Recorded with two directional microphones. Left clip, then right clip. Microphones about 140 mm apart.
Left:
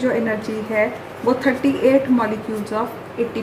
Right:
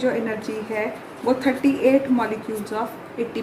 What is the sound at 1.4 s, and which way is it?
A woman's voice, 30° right (ahead or behind).